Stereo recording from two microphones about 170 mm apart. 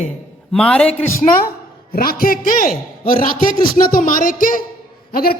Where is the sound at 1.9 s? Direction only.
60° left (ahead or behind).